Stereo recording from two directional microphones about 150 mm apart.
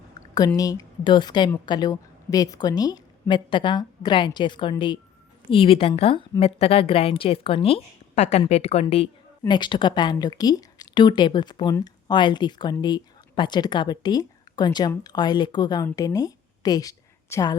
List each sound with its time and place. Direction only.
0.3 s a woman's voice: 25° left (ahead or behind); by 9.0 s 45° left (ahead or behind)
9.5 s a woman's voice: 30° left (ahead or behind)